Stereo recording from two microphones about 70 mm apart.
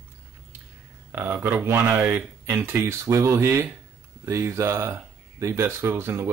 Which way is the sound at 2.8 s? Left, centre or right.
Right.